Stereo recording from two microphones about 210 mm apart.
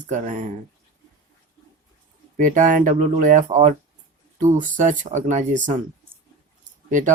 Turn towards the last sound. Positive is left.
turn(degrees=-40)  # may be behind; listen again after turning